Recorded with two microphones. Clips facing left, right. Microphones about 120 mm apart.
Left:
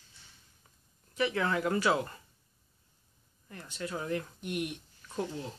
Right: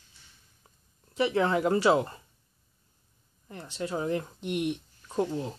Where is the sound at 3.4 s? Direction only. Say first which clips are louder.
Right 5 dB; 30° right (ahead or behind).